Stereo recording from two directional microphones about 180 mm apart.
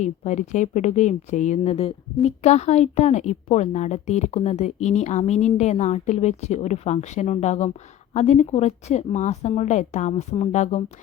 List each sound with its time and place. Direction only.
0.0 s speech: 40° left (ahead or behind)